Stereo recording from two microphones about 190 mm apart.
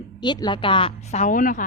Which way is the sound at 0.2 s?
25° left (ahead or behind).